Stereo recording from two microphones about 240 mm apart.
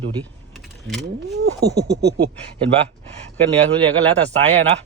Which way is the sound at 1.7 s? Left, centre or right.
Right.